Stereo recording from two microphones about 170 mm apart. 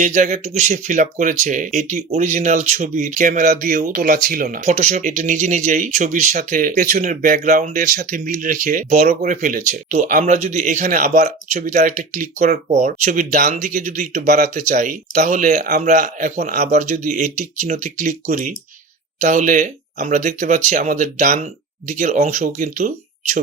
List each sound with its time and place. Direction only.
0.0 s speech: 45° right (ahead or behind)
10.9 s speech: 60° right (ahead or behind)
11.2 s speech: 45° right (ahead or behind)
14.3 s speech: 65° right (ahead or behind)
14.5 s speech: 45° right (ahead or behind)
19.2 s speech: 45° right (ahead or behind)